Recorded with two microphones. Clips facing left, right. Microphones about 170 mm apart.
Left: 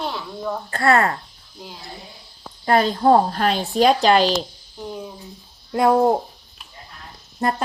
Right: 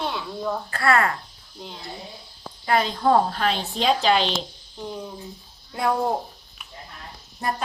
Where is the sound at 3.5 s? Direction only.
45° left (ahead or behind).